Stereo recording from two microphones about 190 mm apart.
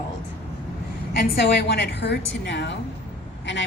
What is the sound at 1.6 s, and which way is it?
A woman's voice, 65° left (ahead or behind).